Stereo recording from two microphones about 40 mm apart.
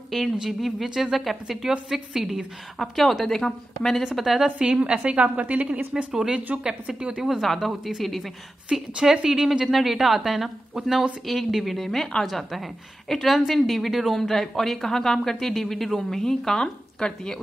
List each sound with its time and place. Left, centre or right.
0.1 s a woman's voice: centre
2.8 s a woman's voice: centre
4.0 s speech: centre
4.6 s a woman's voice: right
7.0 s a woman's voice: right
7.4 s a woman's voice: centre
8.9 s a woman's voice: centre
11.2 s a woman's voice: centre